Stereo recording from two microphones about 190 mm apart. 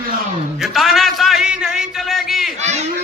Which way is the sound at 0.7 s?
Centre (ahead or behind).